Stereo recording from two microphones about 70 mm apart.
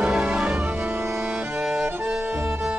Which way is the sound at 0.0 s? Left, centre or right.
Centre.